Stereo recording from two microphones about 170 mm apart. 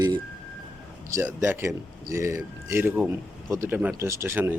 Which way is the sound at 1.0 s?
15° right (ahead or behind).